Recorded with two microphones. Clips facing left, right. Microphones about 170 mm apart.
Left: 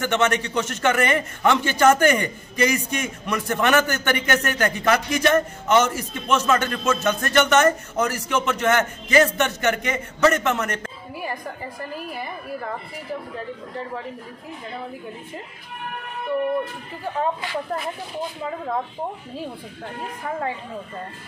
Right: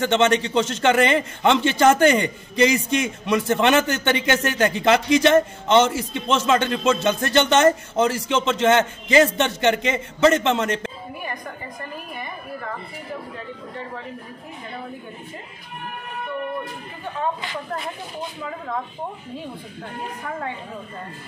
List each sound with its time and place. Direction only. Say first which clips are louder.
0.0 s a man's voice: right 3 dB; 25° right (ahead or behind)